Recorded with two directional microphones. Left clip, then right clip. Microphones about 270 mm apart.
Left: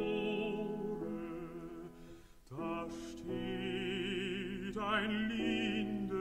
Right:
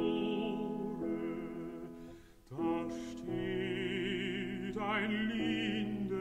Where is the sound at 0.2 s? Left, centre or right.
Centre.